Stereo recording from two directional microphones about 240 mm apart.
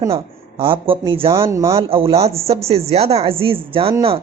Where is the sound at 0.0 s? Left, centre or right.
Right.